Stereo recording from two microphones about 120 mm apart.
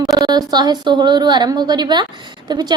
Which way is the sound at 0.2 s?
35° right (ahead or behind).